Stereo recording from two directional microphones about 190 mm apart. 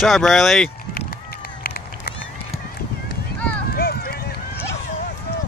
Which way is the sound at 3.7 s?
55° left (ahead or behind).